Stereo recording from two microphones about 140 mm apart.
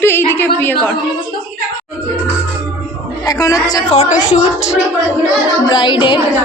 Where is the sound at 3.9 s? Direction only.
55° left (ahead or behind).